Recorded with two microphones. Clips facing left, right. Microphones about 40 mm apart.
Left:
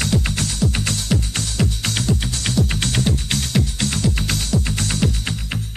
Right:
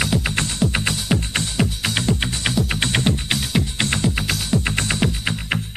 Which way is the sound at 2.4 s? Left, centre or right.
Centre.